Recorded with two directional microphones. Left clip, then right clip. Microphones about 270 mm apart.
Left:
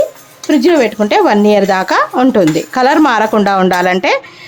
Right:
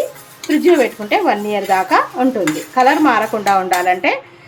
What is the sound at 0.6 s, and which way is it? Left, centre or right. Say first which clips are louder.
Speech: left 2 dB; left.